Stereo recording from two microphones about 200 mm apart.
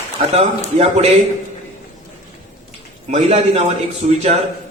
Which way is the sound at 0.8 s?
35° right (ahead or behind).